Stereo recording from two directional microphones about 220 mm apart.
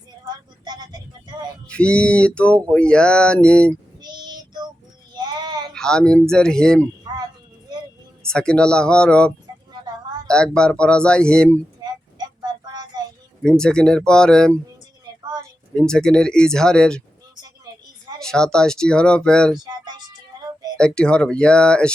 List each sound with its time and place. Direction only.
0.6 s music: 20° right (ahead or behind)
1.6 s speech: 5° left (ahead or behind)
4.0 s child singing: 20° right (ahead or behind)
5.7 s speech: 5° left (ahead or behind)
7.1 s a sound: 20° right (ahead or behind)
8.2 s speech: 5° left (ahead or behind)
12.4 s child singing: 20° right (ahead or behind)
13.4 s speech: 5° left (ahead or behind)
15.1 s a sound: 20° right (ahead or behind)
15.7 s speech: 5° left (ahead or behind)
18.2 s speech: 5° left (ahead or behind)
20.7 s speech: 5° left (ahead or behind)